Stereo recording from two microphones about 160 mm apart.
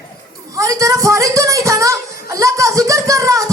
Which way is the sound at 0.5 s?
20° right (ahead or behind).